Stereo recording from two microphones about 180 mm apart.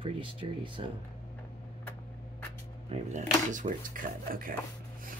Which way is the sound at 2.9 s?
40° right (ahead or behind).